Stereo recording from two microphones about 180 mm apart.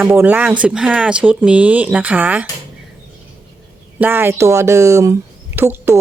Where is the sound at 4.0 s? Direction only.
10° right (ahead or behind).